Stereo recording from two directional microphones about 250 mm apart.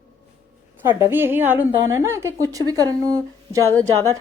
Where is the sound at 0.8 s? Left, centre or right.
Centre.